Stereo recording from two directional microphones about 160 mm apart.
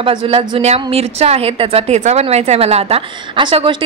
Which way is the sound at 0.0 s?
35° right (ahead or behind).